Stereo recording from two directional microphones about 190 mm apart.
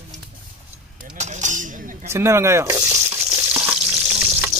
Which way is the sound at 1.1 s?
40° right (ahead or behind).